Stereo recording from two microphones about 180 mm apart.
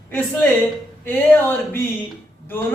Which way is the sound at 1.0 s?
10° left (ahead or behind).